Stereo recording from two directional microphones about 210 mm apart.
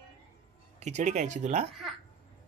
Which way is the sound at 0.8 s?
35° right (ahead or behind).